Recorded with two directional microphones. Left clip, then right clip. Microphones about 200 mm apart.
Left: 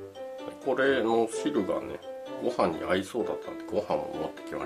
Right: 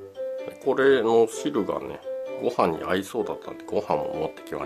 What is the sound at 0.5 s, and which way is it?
Speech, 45° right (ahead or behind).